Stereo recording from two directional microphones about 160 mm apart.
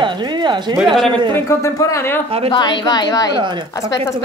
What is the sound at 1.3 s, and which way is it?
Speech, 20° left (ahead or behind).